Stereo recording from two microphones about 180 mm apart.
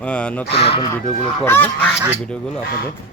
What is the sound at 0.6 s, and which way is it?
Speech, 30° left (ahead or behind).